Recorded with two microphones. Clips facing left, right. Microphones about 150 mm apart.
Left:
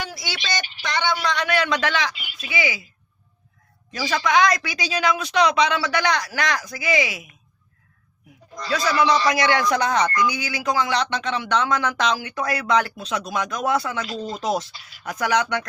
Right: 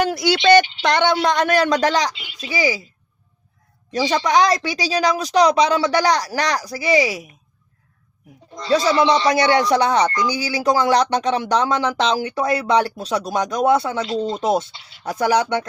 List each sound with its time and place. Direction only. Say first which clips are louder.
0.0 s a sound: right 15 dB; 60° right (ahead or behind)
0.8 s speech: right 7 dB; 60° right (ahead or behind)
1.2 s speech: right 6 dB; 45° right (ahead or behind)
2.1 s speech: right 4 dB; 25° right (ahead or behind)
2.6 s speech: right 5 dB; 35° right (ahead or behind)
3.9 s speech: right 3 dB; 30° right (ahead or behind)
8.5 s speech: right 5 dB; 25° right (ahead or behind)